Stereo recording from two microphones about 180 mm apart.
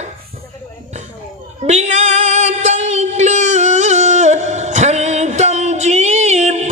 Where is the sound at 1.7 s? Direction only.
40° right (ahead or behind).